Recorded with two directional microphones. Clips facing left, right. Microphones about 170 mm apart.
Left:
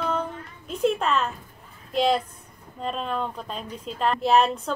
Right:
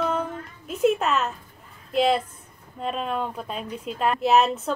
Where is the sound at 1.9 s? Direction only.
5° right (ahead or behind).